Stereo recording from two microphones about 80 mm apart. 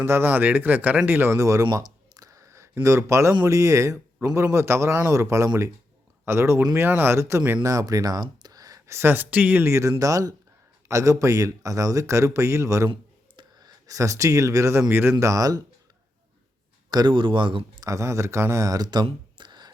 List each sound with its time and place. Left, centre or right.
0.0 s speech: right
1.7 s clicking: right
2.8 s speech: right
7.6 s speech: right
9.0 s speech: right
10.0 s speech: right
12.9 s clicking: right
13.8 s speech: right
15.2 s speech: right
16.9 s speech: right
17.7 s speech: right